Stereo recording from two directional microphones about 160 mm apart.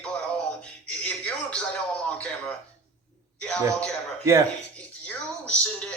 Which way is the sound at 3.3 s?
5° left (ahead or behind).